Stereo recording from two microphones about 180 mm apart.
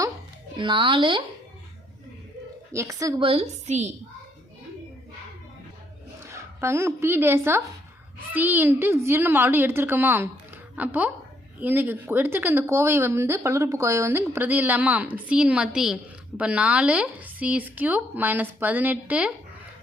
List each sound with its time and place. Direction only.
0.5 s speech: 25° right (ahead or behind)
2.7 s speech: 15° right (ahead or behind)
3.2 s a woman's voice: 35° right (ahead or behind)
6.2 s a woman's voice: 15° right (ahead or behind)